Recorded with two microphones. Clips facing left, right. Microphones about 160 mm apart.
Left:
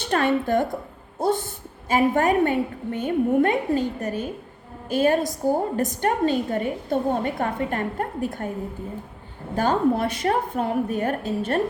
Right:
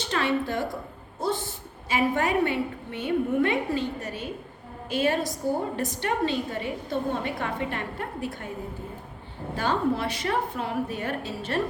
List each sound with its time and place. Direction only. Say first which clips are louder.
0.1 s a woman's voice: left 6 dB; 50° left (ahead or behind)
9.6 s a woman's voice: left 5 dB; 50° left (ahead or behind)